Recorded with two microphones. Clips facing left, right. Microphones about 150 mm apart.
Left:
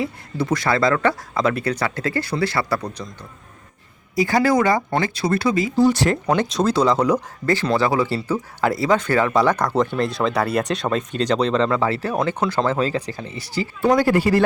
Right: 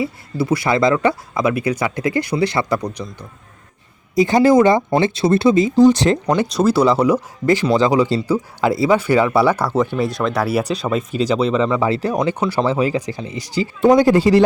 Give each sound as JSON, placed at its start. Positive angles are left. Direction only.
{"t": 0.0, "sound": "speech", "side_deg": -5}
{"t": 4.1, "sound": "speech", "side_deg": -20}
{"t": 6.3, "sound": "speech", "side_deg": -5}